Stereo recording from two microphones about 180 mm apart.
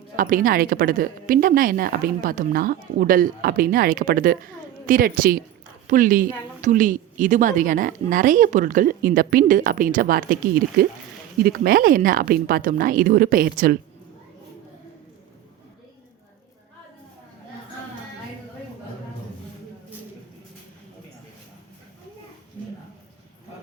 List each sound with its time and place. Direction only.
0.2 s a woman's voice: 50° right (ahead or behind)